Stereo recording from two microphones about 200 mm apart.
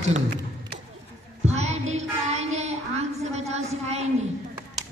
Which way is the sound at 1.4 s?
35° right (ahead or behind).